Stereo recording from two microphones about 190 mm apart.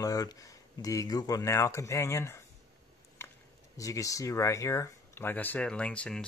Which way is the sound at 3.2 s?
10° left (ahead or behind).